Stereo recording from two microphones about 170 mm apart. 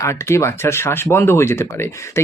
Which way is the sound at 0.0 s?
15° left (ahead or behind).